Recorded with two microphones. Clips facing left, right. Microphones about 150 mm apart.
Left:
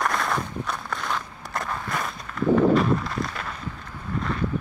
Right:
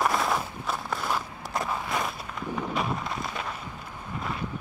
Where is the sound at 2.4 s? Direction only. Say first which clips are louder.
Left 14 dB; 90° left.